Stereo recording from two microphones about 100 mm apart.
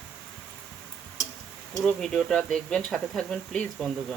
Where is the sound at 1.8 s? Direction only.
5° left (ahead or behind).